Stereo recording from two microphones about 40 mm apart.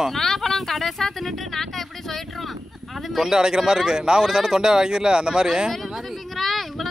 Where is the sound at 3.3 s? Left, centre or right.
Centre.